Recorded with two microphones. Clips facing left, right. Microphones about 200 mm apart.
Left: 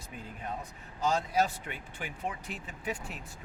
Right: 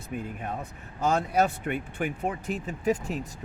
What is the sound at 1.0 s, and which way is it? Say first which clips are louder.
Speech: right 4 dB; 55° right (ahead or behind).